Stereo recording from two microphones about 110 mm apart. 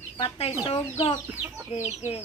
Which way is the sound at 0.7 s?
60° left (ahead or behind).